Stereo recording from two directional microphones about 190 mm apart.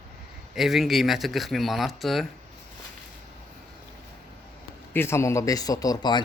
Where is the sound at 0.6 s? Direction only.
Centre (ahead or behind).